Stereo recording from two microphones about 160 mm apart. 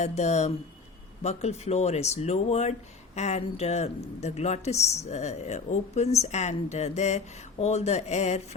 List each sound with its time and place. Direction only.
0.0 s speech: 45° left (ahead or behind)